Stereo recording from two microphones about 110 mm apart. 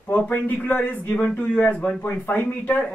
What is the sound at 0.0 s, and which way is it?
Speech, 15° left (ahead or behind).